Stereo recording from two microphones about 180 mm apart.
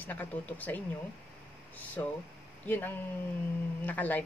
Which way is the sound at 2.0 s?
15° left (ahead or behind).